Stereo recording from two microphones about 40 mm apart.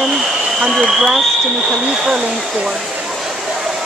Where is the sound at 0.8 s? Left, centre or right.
Centre.